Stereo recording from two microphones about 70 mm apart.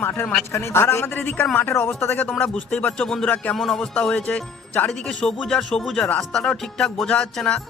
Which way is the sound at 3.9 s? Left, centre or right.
Centre.